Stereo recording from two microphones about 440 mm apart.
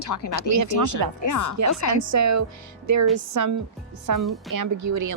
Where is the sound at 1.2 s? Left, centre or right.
Left.